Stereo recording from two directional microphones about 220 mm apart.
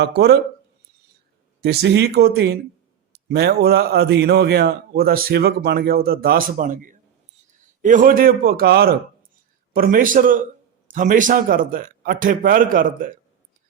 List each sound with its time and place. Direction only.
0.0 s speech: 50° right (ahead or behind)
1.6 s a man's voice: 50° right (ahead or behind)